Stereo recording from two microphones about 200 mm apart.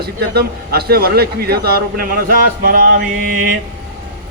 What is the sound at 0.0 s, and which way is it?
Speech, 50° right (ahead or behind).